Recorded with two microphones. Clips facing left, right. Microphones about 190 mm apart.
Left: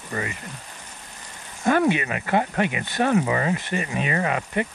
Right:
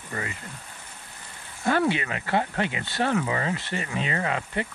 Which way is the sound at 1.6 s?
20° left (ahead or behind).